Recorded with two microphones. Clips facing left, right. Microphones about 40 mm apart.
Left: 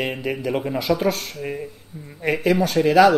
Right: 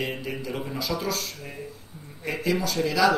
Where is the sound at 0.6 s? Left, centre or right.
Left.